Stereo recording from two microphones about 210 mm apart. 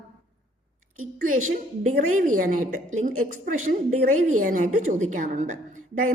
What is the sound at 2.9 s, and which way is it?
Speech, 70° right (ahead or behind).